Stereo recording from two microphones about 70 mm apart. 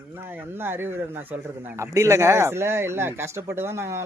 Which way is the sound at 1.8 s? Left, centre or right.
Right.